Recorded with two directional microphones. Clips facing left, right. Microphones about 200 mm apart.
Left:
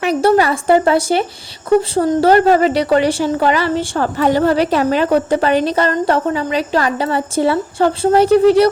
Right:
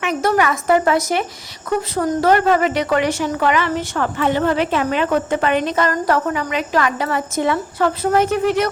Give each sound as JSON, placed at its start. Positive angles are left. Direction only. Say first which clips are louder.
{"t": 0.0, "sound": "a woman's voice", "louder": "left 5 dB", "side_deg": 35}